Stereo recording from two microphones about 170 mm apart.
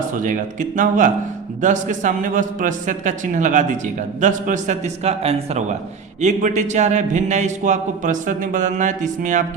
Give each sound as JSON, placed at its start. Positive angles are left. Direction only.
{"t": 0.1, "sound": "a man's voice", "side_deg": -50}